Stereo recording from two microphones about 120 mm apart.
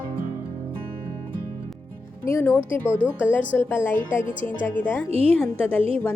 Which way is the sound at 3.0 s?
10° right (ahead or behind).